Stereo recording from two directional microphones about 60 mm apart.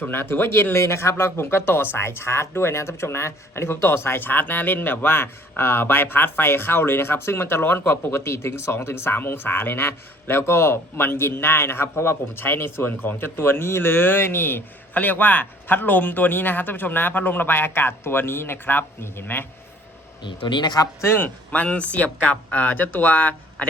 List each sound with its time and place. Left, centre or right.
0.0 s speech: left
21.0 s speech: left